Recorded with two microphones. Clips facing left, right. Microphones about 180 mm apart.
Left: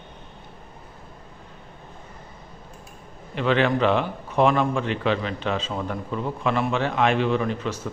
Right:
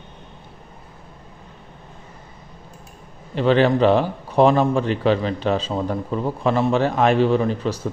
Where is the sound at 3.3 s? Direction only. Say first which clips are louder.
Right 5 dB; 35° right (ahead or behind).